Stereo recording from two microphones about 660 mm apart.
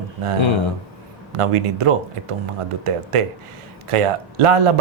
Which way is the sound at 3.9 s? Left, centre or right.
Right.